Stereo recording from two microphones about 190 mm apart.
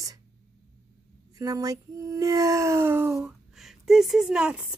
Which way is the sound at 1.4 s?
20° right (ahead or behind).